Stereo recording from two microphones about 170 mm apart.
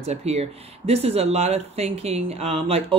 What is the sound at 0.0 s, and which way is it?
Speech, 40° right (ahead or behind).